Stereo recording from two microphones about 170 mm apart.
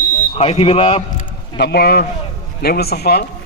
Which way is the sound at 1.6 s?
70° left (ahead or behind).